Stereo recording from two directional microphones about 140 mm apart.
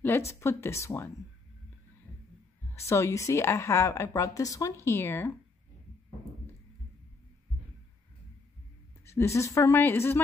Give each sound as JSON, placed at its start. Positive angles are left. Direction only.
{"t": 0.3, "sound": "a woman's voice", "side_deg": 20}
{"t": 2.7, "sound": "a woman's voice", "side_deg": 20}
{"t": 9.0, "sound": "a woman's voice", "side_deg": 20}